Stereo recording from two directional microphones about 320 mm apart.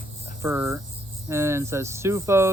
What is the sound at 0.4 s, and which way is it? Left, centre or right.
Speech, centre.